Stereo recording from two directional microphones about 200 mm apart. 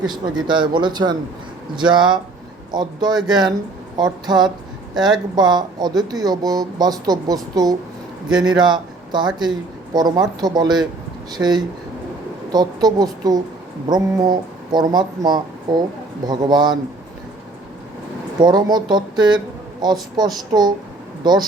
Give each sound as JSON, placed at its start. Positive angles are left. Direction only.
{"t": 0.1, "sound": "speech", "side_deg": -20}
{"t": 18.3, "sound": "speech", "side_deg": -20}